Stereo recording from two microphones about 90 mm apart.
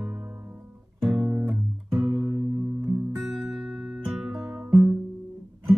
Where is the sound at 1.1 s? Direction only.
15° right (ahead or behind).